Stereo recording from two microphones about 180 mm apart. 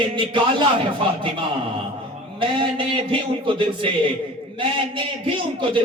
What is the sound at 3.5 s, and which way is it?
Speech, 30° right (ahead or behind).